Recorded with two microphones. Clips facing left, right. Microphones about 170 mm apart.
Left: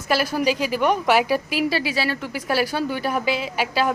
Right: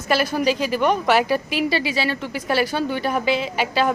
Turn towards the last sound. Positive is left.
turn(degrees=5)  # may be behind; listen again after turning